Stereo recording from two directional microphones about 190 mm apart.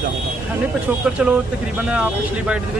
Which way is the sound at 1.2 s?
5° right (ahead or behind).